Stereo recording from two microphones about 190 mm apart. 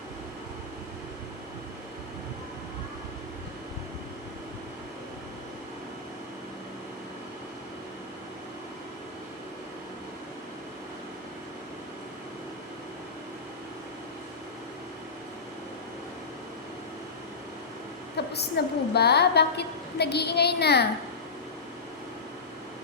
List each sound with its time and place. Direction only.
18.3 s a woman's voice: 60° left (ahead or behind)